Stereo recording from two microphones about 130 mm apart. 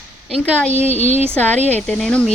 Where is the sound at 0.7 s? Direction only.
50° left (ahead or behind).